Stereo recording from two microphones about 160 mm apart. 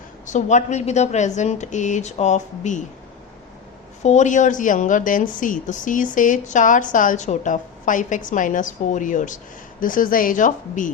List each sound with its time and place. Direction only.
0.3 s a woman's voice: 50° left (ahead or behind)
4.0 s a woman's voice: 45° left (ahead or behind)